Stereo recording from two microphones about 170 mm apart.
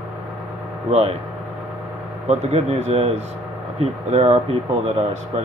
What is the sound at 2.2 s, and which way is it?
Speech, 40° right (ahead or behind).